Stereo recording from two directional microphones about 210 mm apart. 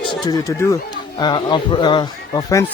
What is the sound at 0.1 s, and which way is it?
Speech, 15° left (ahead or behind).